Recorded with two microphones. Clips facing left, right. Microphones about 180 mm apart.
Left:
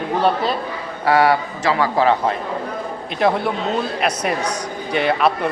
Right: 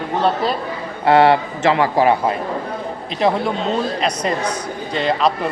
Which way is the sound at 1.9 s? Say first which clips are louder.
Right 1 dB; 10° right (ahead or behind).